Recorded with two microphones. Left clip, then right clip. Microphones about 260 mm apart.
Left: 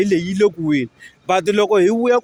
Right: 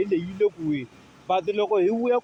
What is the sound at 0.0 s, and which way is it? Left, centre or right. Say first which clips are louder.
A man's voice: left 7 dB; left.